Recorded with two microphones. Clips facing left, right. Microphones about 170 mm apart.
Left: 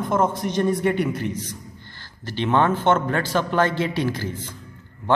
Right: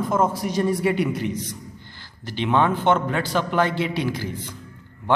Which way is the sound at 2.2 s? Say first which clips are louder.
Left 1 dB; 15° right (ahead or behind).